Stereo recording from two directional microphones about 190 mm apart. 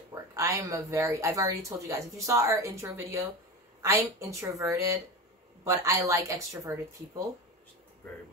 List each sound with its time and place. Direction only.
0.1 s speech: 15° right (ahead or behind)